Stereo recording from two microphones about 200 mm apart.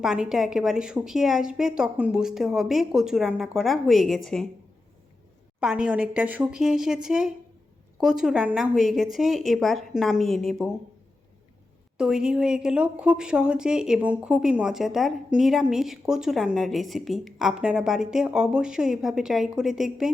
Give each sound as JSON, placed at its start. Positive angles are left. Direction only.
{"t": 0.0, "sound": "a woman's voice", "side_deg": -5}
{"t": 5.5, "sound": "a woman's voice", "side_deg": -5}
{"t": 11.9, "sound": "a woman's voice", "side_deg": -5}